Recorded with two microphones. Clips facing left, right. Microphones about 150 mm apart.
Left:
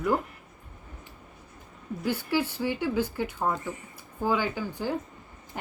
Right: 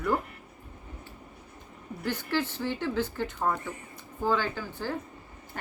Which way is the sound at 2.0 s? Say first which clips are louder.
Left 2 dB; 10° left (ahead or behind).